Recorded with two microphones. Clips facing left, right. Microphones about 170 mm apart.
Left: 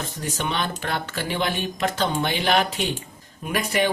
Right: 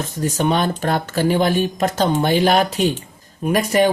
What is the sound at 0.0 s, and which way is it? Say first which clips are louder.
Speech: right 8 dB; 40° right (ahead or behind).